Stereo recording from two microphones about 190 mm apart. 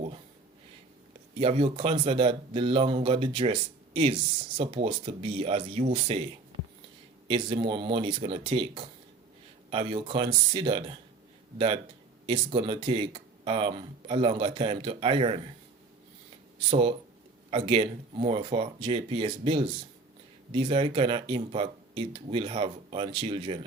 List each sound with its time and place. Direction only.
1.4 s speech: 30° right (ahead or behind)
16.6 s speech: 30° right (ahead or behind)